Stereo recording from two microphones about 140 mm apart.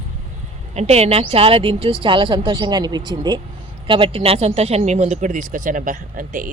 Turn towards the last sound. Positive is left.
turn(degrees=-80)